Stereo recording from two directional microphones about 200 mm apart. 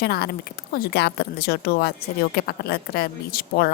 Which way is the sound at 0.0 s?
50° left (ahead or behind).